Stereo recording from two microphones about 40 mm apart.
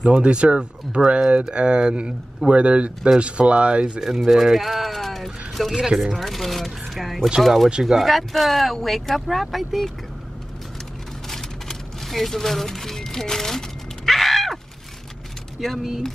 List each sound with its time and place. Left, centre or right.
0.1 s speech: right
1.5 s speech: right
4.0 s speech: centre
11.2 s a sound: centre
15.6 s speech: centre